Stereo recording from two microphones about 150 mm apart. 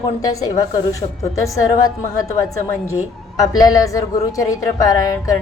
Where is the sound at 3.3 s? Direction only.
25° left (ahead or behind).